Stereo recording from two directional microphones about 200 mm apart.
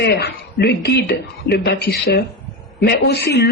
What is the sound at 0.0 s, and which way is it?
A woman's voice, 55° left (ahead or behind).